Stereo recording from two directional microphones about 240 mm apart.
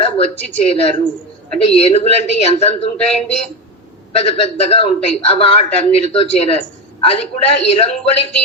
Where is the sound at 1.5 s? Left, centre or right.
Left.